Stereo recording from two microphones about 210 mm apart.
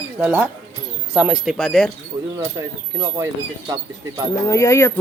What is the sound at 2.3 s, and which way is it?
Speech, 15° right (ahead or behind).